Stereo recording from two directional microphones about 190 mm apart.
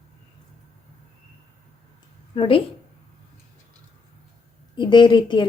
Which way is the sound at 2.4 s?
30° left (ahead or behind).